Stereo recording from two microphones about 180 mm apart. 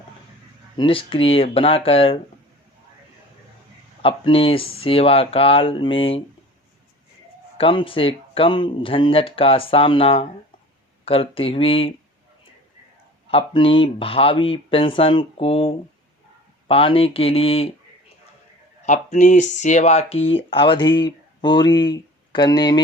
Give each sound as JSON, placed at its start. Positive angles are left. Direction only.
{"t": 0.8, "sound": "speech", "side_deg": 30}
{"t": 4.0, "sound": "speech", "side_deg": 30}
{"t": 7.6, "sound": "speech", "side_deg": 30}
{"t": 13.3, "sound": "speech", "side_deg": 30}
{"t": 18.9, "sound": "speech", "side_deg": 40}